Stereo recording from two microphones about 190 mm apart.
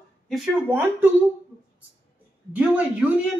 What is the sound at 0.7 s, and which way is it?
Speech, 10° right (ahead or behind).